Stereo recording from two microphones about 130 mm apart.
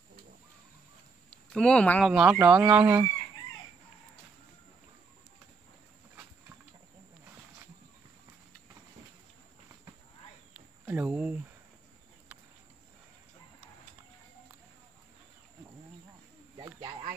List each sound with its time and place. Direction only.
1.3 s speech: 5° left (ahead or behind)
2.0 s speech: 5° right (ahead or behind)
10.9 s a sound: 15° right (ahead or behind)